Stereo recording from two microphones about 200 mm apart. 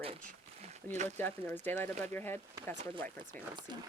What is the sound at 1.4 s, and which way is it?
Speech, 10° left (ahead or behind).